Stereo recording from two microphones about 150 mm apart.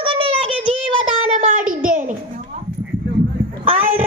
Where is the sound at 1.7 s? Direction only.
65° right (ahead or behind).